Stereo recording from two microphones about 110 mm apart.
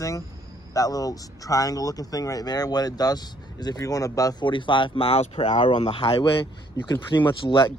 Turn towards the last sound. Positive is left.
turn(degrees=45)  # may be behind; listen again after turning